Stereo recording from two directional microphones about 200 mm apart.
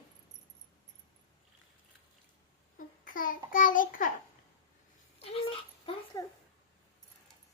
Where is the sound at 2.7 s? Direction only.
40° left (ahead or behind).